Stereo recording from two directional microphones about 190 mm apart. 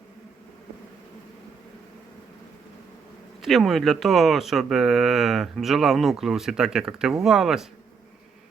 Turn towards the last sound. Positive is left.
turn(degrees=0)  # may be behind; listen again after turning